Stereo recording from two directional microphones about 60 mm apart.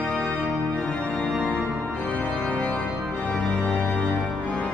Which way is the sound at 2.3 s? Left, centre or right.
Centre.